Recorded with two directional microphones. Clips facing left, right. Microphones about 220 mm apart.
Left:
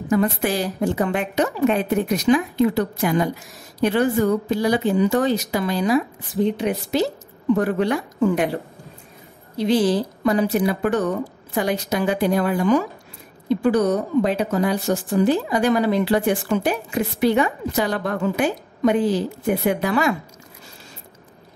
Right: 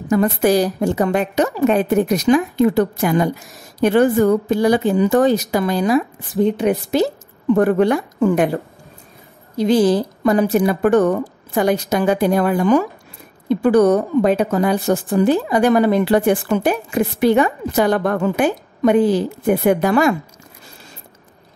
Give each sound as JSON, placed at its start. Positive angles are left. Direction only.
{"t": 0.1, "sound": "a woman's voice", "side_deg": -45}
{"t": 9.6, "sound": "a woman's voice", "side_deg": -45}